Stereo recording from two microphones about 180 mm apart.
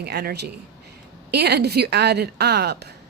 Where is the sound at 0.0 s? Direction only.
65° right (ahead or behind).